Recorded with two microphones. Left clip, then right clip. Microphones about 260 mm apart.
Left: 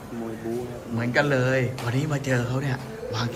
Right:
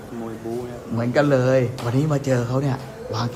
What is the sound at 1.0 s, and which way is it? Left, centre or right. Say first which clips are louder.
Speech: right 4 dB; centre.